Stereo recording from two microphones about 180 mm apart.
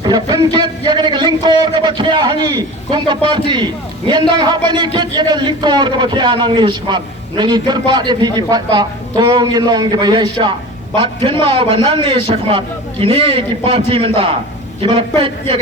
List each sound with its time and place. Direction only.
0.0 s speech: 25° right (ahead or behind)